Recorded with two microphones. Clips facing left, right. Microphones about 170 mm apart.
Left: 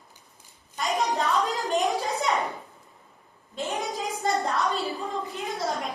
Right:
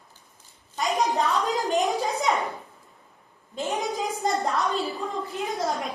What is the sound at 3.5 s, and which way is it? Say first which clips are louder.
A woman's voice: right 2 dB; centre (ahead or behind).